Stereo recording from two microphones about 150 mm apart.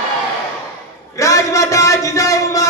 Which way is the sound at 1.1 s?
20° left (ahead or behind).